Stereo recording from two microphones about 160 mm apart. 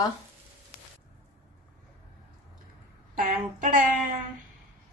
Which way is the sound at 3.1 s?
60° right (ahead or behind).